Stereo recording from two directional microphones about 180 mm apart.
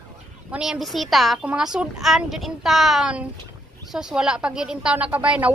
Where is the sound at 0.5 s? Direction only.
5° right (ahead or behind).